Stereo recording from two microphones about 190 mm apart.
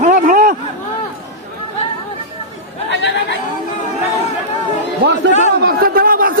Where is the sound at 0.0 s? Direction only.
45° right (ahead or behind).